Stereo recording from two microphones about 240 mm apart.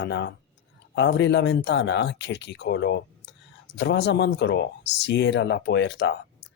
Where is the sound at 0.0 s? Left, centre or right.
Left.